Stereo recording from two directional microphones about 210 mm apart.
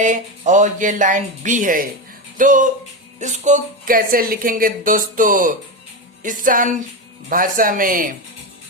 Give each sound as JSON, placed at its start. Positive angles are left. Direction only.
{"t": 0.0, "sound": "speech", "side_deg": -35}